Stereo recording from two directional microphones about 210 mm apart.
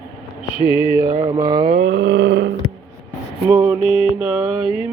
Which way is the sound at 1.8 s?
45° right (ahead or behind).